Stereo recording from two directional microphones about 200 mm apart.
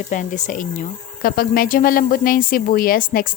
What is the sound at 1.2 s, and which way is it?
A woman's voice, 45° left (ahead or behind).